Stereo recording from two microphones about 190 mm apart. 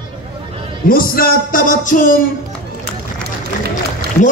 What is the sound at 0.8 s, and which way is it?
Speech, 50° left (ahead or behind).